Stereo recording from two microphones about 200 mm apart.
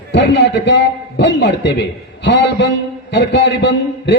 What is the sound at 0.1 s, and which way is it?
A man's voice, 60° left (ahead or behind).